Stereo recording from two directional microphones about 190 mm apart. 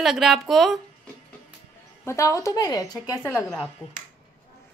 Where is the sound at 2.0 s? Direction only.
15° left (ahead or behind).